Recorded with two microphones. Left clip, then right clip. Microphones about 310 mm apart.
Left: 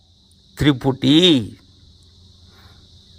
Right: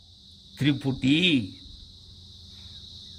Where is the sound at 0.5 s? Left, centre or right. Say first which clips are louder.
Left 9 dB; centre.